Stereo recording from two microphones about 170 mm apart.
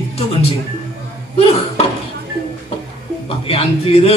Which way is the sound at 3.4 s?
35° left (ahead or behind).